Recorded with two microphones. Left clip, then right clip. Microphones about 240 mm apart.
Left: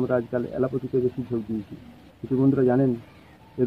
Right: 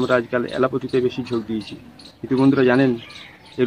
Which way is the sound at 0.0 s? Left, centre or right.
Right.